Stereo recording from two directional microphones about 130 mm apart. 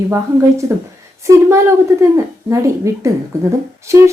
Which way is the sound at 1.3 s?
25° right (ahead or behind).